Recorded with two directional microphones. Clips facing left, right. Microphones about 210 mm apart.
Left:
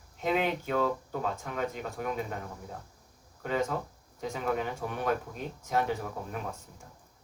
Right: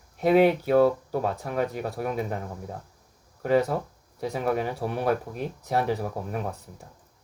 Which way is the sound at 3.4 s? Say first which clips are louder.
Right 8 dB; 35° right (ahead or behind).